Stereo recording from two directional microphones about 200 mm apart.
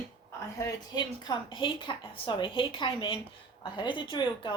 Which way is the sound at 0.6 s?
20° left (ahead or behind).